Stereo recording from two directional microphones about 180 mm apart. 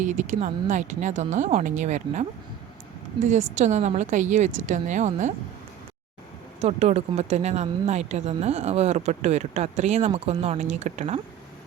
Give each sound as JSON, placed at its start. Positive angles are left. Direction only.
{"t": 0.0, "sound": "speech", "side_deg": -40}
{"t": 3.6, "sound": "speech", "side_deg": -40}
{"t": 6.6, "sound": "speech", "side_deg": -35}